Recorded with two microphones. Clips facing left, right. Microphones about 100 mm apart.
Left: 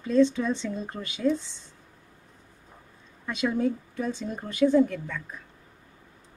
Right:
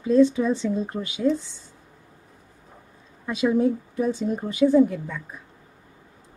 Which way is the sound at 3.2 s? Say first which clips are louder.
Right 5 dB; 10° right (ahead or behind).